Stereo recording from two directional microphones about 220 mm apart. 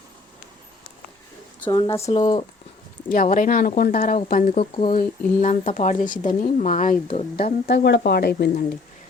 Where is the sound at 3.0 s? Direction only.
35° left (ahead or behind).